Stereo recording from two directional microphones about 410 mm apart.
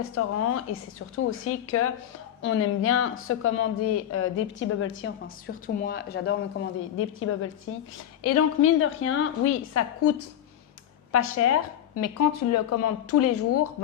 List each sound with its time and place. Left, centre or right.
0.1 s speech: left